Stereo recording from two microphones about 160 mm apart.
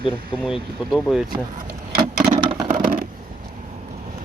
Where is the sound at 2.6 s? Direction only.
60° right (ahead or behind).